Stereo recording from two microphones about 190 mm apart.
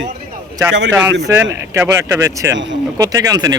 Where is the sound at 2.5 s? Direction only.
75° right (ahead or behind).